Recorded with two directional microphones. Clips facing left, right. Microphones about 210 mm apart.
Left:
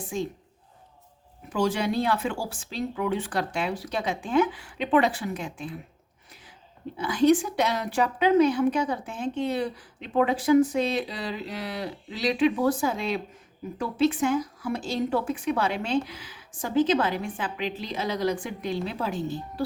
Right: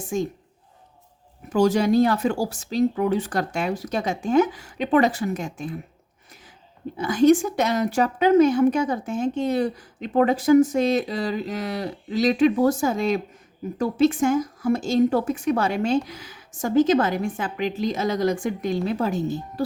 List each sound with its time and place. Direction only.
0.0 s a woman's voice: 45° right (ahead or behind)
1.5 s a woman's voice: 40° right (ahead or behind)
7.0 s a woman's voice: 45° right (ahead or behind)